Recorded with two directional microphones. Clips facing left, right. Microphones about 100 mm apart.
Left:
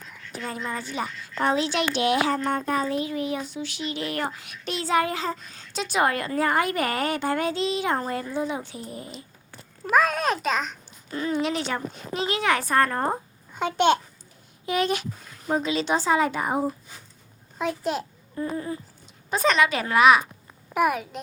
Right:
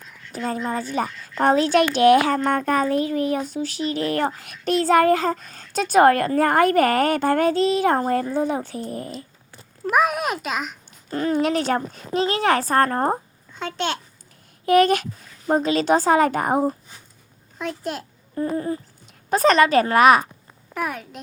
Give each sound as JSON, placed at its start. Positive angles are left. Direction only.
{"t": 0.4, "sound": "a woman's voice", "side_deg": -35}
{"t": 9.9, "sound": "a child's voice", "side_deg": -15}
{"t": 11.1, "sound": "a woman's voice", "side_deg": -45}
{"t": 13.6, "sound": "a child's voice", "side_deg": 15}
{"t": 14.7, "sound": "a woman's voice", "side_deg": -50}
{"t": 17.6, "sound": "a child's voice", "side_deg": 5}
{"t": 18.3, "sound": "a woman's voice", "side_deg": -40}
{"t": 20.7, "sound": "a child's voice", "side_deg": 10}